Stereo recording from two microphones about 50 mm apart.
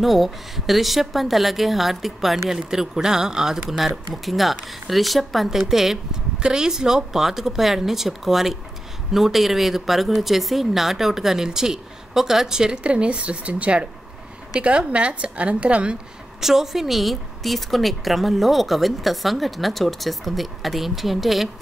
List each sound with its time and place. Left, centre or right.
0.0 s a woman's voice: centre; by 16.0 s right
16.3 s a woman's voice: centre